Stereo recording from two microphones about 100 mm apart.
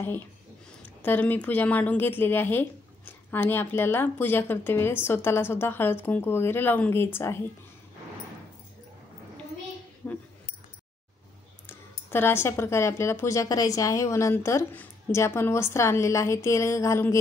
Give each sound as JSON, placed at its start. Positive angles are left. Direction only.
{"t": 0.8, "sound": "speech", "side_deg": 15}
{"t": 10.0, "sound": "speech", "side_deg": 20}
{"t": 11.6, "sound": "speech", "side_deg": 20}